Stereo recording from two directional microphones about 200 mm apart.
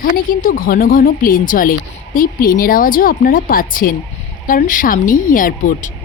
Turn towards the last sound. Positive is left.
turn(degrees=40)  # may be behind; listen again after turning